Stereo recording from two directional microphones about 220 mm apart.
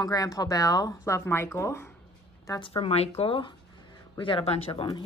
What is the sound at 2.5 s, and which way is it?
A woman's voice, 25° left (ahead or behind).